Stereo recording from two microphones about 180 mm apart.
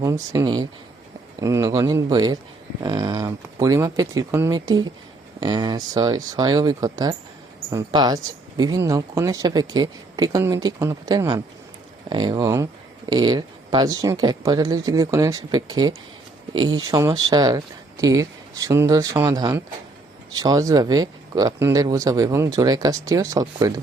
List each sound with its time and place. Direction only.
0.0 s speech: 20° right (ahead or behind)